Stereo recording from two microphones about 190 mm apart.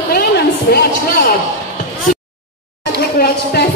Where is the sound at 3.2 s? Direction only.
55° left (ahead or behind).